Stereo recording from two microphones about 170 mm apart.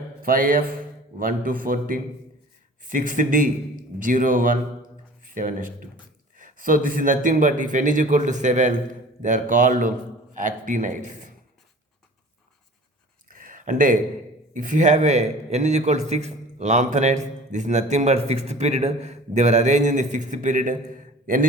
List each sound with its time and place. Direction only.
0.2 s a man's voice: 55° right (ahead or behind)
13.2 s a sound: 55° right (ahead or behind)
14.5 s speech: 50° right (ahead or behind)